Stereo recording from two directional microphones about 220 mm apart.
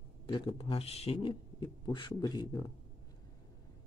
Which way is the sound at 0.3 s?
20° left (ahead or behind).